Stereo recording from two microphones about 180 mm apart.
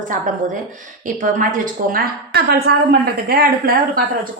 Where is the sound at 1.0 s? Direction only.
45° right (ahead or behind); by 2.7 s 60° right (ahead or behind).